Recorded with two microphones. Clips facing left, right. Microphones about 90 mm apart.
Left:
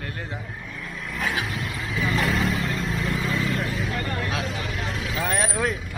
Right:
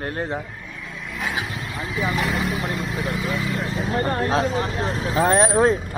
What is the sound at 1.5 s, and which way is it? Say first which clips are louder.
Vehicle: right 1 dB; 35° right (ahead or behind).